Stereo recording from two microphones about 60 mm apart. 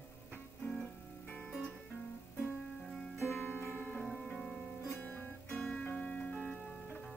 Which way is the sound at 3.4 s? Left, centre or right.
Left.